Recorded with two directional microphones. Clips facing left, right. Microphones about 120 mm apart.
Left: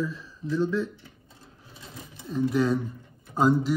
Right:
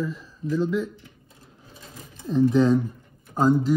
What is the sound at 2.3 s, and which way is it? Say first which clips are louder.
Speech: right 6 dB; 25° right (ahead or behind).